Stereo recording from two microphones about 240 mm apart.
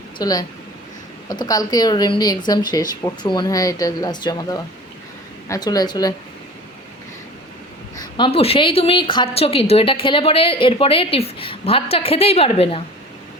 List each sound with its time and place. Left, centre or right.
0.2 s speech: centre
7.9 s a woman's voice: centre